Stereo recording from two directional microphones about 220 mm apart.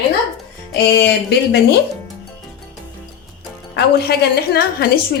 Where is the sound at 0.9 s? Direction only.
50° left (ahead or behind).